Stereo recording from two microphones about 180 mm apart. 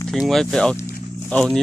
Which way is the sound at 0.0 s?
Centre (ahead or behind).